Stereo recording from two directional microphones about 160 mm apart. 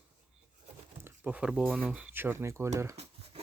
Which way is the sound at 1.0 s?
10° right (ahead or behind).